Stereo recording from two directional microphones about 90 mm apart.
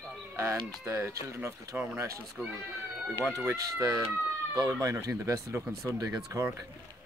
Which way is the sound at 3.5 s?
40° right (ahead or behind).